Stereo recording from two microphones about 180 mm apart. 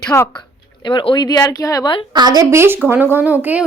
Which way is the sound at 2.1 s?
20° right (ahead or behind).